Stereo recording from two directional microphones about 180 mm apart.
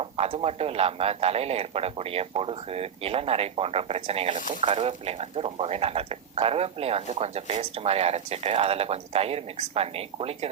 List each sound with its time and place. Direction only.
0.0 s speech: 35° right (ahead or behind)